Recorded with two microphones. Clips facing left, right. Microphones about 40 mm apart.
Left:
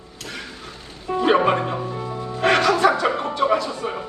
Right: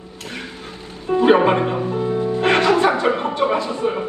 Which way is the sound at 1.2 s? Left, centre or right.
Right.